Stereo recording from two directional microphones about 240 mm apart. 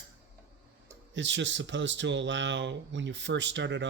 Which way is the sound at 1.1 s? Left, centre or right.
Right.